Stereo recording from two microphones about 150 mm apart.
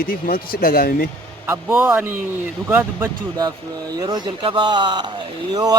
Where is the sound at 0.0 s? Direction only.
75° left (ahead or behind).